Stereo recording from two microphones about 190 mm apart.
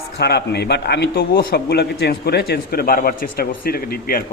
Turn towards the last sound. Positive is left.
turn(degrees=50)  # may be behind; listen again after turning